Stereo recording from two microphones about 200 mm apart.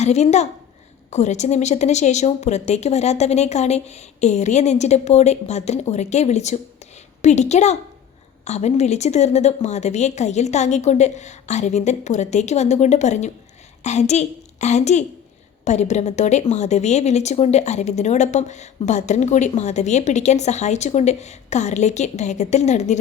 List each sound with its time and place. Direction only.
0.0 s a woman's voice: 35° left (ahead or behind)